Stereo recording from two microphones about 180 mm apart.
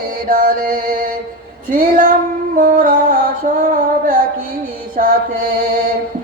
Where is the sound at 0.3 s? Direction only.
50° right (ahead or behind).